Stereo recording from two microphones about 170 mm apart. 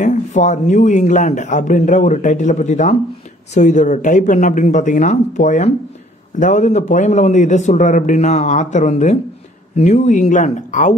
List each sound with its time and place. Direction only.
0.0 s speech: 45° left (ahead or behind)